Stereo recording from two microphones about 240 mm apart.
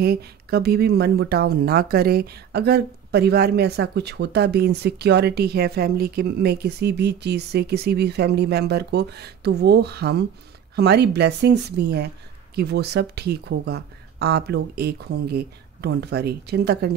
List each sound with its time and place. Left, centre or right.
0.0 s speech: right